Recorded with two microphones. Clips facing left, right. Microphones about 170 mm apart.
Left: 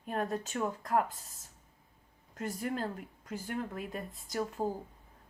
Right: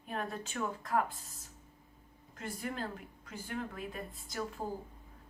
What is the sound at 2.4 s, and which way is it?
Speech, 45° left (ahead or behind).